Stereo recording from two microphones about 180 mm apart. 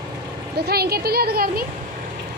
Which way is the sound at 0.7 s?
60° right (ahead or behind).